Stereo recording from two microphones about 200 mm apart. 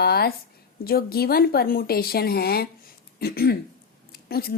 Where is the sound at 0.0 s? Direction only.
50° left (ahead or behind).